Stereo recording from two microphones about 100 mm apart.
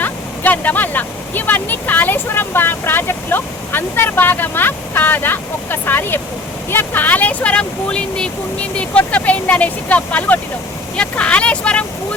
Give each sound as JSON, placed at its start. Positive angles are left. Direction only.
{"t": 0.0, "sound": "speech", "side_deg": 15}